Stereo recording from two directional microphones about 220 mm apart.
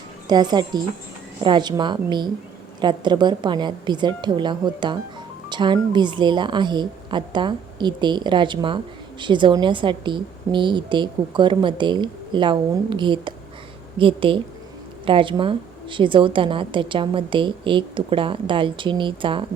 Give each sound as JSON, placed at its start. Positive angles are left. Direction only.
{"t": 0.3, "sound": "a woman's voice", "side_deg": -20}